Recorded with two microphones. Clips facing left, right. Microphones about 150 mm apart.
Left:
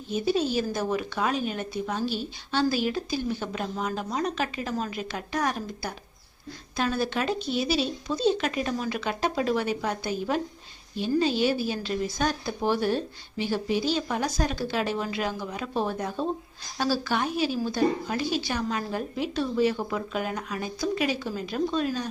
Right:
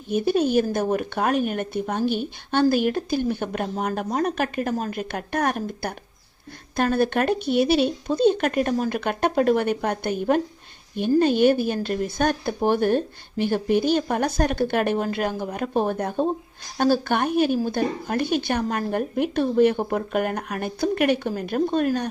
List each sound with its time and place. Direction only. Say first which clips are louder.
0.1 s speech: right 5 dB; 55° right (ahead or behind)